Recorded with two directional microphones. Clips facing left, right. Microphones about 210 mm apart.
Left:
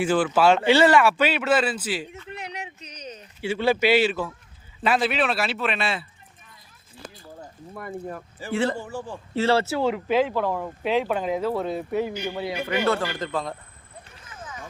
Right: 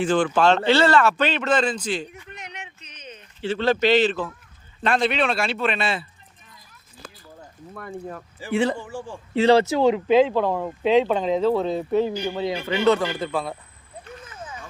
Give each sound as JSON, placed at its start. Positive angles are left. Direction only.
{"t": 0.0, "sound": "speech", "side_deg": 5}
{"t": 2.3, "sound": "a sound", "side_deg": 35}
{"t": 3.4, "sound": "a man's voice", "side_deg": 10}
{"t": 7.7, "sound": "speech", "side_deg": 5}
{"t": 9.3, "sound": "speech", "side_deg": -15}